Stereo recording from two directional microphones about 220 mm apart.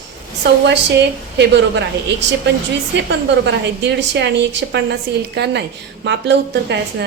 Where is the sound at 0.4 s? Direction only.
50° right (ahead or behind).